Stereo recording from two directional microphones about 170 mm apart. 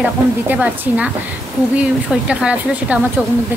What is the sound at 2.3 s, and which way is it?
Speech, 5° right (ahead or behind).